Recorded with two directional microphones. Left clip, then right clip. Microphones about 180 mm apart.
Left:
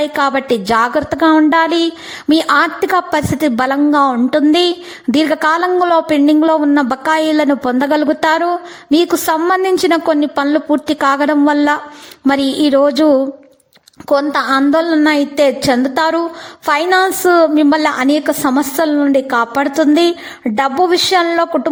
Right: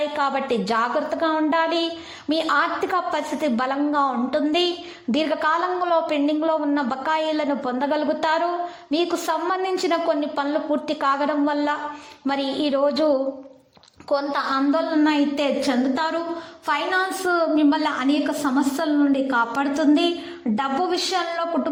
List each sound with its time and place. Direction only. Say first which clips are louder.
0.2 s a woman's voice: left 10 dB; 45° left (ahead or behind)